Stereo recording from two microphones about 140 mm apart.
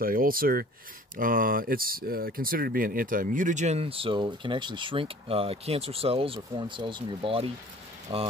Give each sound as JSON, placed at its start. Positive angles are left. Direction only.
{"t": 0.0, "sound": "speech", "side_deg": -90}
{"t": 1.1, "sound": "speech", "side_deg": -75}